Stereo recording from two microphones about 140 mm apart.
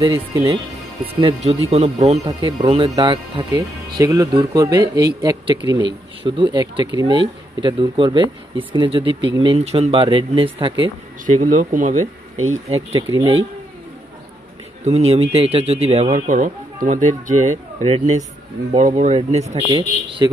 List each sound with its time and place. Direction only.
0.3 s speech: 30° right (ahead or behind)
1.2 s speech: 50° right (ahead or behind)
2.2 s speech: 35° right (ahead or behind)
11.2 s speech: 70° right (ahead or behind); by 13.5 s 45° right (ahead or behind)
14.9 s speech: 45° right (ahead or behind)
19.5 s speech: 30° right (ahead or behind)